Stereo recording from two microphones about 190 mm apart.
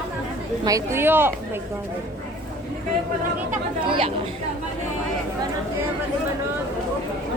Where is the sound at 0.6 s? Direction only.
20° right (ahead or behind).